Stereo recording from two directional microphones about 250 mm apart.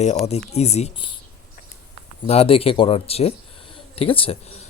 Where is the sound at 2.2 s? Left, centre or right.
Left.